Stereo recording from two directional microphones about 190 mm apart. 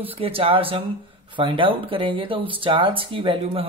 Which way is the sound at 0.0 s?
30° right (ahead or behind).